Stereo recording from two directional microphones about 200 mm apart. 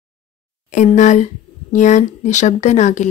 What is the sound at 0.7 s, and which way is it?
Speech, 40° left (ahead or behind).